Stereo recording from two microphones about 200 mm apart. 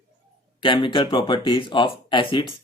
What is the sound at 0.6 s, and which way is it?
Speech, 25° left (ahead or behind).